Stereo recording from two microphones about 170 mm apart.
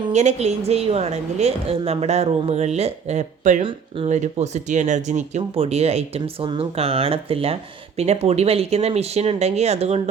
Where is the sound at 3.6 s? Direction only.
30° right (ahead or behind).